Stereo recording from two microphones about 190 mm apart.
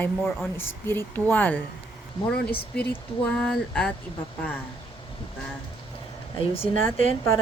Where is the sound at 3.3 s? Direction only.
5° left (ahead or behind).